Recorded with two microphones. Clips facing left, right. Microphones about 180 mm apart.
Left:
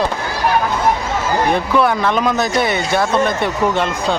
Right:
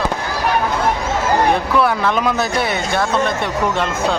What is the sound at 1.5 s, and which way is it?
Speech, 5° right (ahead or behind).